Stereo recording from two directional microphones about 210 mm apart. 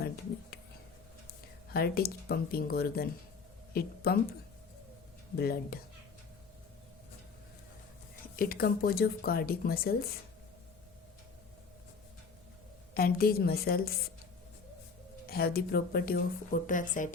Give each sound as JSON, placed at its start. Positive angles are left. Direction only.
{"t": 1.7, "sound": "speech", "side_deg": 45}
{"t": 5.4, "sound": "speech", "side_deg": 45}
{"t": 8.4, "sound": "speech", "side_deg": 45}
{"t": 12.9, "sound": "speech", "side_deg": 45}
{"t": 15.3, "sound": "speech", "side_deg": 45}